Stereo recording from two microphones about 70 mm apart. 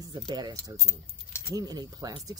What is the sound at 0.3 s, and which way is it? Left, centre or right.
Speech, right.